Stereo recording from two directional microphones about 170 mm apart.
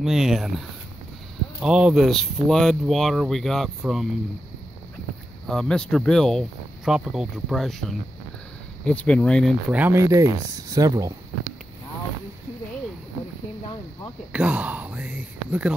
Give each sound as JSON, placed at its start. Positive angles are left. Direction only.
{"t": 0.0, "sound": "speech", "side_deg": 0}
{"t": 5.5, "sound": "speech", "side_deg": 5}
{"t": 8.8, "sound": "speech", "side_deg": 5}
{"t": 9.8, "sound": "speech", "side_deg": -15}
{"t": 14.3, "sound": "speech", "side_deg": -10}